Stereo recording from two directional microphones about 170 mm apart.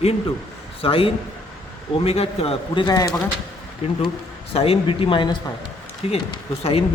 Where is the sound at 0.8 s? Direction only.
35° left (ahead or behind).